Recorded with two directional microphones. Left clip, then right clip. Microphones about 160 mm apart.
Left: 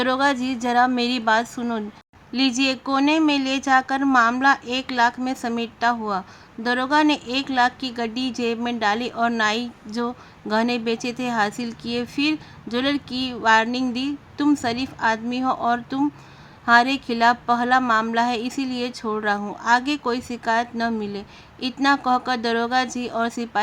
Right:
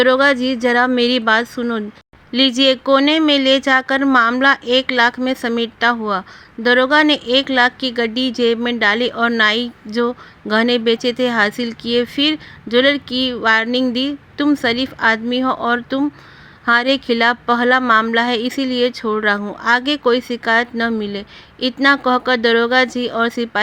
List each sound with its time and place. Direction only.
0.0 s speech: 10° right (ahead or behind)